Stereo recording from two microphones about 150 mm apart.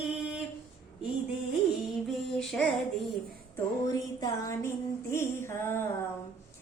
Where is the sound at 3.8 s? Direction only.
25° left (ahead or behind).